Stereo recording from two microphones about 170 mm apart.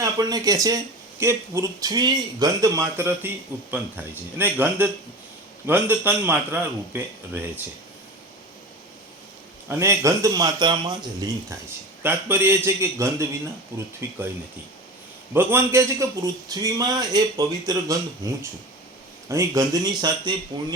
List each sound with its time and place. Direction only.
0.0 s a man's voice: 20° right (ahead or behind)
9.6 s a man's voice: 15° right (ahead or behind)
15.3 s a man's voice: 10° right (ahead or behind)